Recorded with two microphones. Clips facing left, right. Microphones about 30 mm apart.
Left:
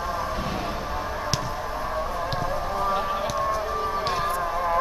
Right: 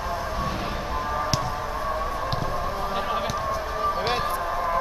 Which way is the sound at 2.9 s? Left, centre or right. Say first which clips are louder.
Left 1 dB; centre.